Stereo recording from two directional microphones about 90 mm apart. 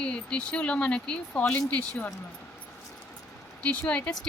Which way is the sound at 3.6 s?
15° left (ahead or behind).